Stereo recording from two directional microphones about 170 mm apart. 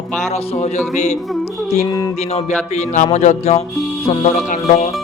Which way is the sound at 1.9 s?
20° left (ahead or behind).